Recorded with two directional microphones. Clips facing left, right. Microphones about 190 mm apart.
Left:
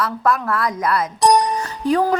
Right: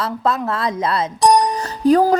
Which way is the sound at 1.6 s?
40° right (ahead or behind).